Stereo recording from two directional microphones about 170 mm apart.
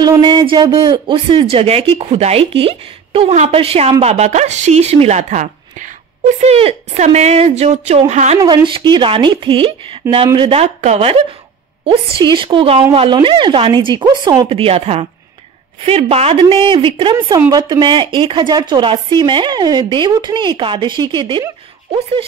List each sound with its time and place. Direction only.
0.0 s a woman's voice: 25° right (ahead or behind); by 8.4 s 45° right (ahead or behind)
8.4 s speech: 25° right (ahead or behind)